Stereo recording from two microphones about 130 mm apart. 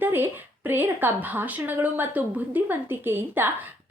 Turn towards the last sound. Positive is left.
turn(degrees=-15)  # may be behind; listen again after turning